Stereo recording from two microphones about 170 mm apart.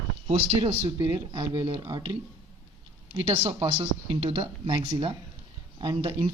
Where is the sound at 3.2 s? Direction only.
35° right (ahead or behind).